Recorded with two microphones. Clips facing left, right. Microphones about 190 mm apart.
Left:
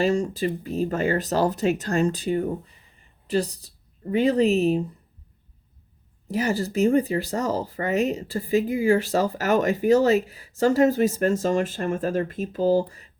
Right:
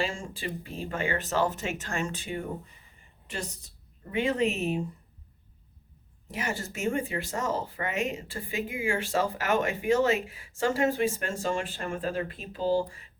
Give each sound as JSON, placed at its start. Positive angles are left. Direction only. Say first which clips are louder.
{"t": 0.0, "sound": "speech", "louder": "left 11 dB", "side_deg": 40}
{"t": 6.2, "sound": "speech", "louder": "left 9 dB", "side_deg": 35}